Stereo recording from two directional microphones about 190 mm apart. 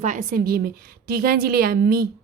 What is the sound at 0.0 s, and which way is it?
Speech, 40° right (ahead or behind).